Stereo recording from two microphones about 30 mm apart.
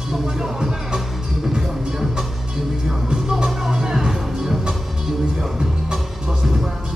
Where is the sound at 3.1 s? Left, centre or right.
Right.